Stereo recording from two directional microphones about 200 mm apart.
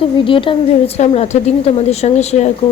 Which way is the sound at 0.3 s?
25° left (ahead or behind).